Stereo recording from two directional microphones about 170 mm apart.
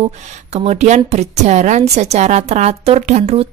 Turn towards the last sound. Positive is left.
turn(degrees=-40)  # may be behind; listen again after turning